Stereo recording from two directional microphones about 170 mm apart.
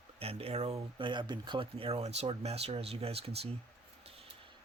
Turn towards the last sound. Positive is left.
turn(degrees=-35)  # may be behind; listen again after turning